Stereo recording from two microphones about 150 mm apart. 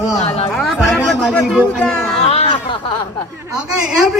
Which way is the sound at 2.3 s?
40° left (ahead or behind).